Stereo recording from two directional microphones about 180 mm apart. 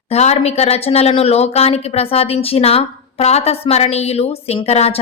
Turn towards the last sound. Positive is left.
turn(degrees=35)  # may be behind; listen again after turning